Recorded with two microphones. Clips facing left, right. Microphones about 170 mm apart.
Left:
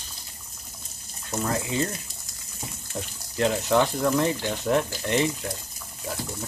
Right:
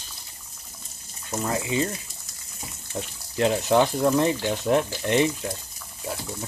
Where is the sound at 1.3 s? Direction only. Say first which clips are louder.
Right 1 dB; 5° right (ahead or behind).